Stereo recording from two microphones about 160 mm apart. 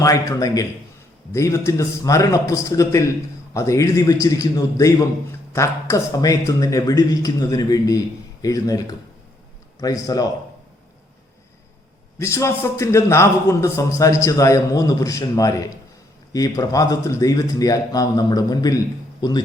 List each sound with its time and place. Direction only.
0.0 s a man's voice: 20° left (ahead or behind)
9.8 s a man's voice: 25° left (ahead or behind)
12.2 s a man's voice: 20° left (ahead or behind)